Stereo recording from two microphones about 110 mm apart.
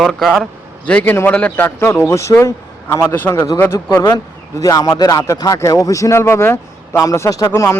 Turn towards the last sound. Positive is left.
turn(degrees=25)  # may be behind; listen again after turning